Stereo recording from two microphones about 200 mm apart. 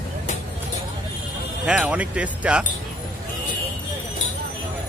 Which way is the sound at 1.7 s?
5° right (ahead or behind).